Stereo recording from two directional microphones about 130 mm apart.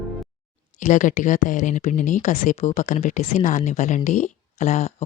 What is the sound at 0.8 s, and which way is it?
Speech, 75° left (ahead or behind).